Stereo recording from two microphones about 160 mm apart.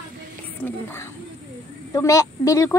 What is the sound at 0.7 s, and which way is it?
A child's voice, 15° left (ahead or behind).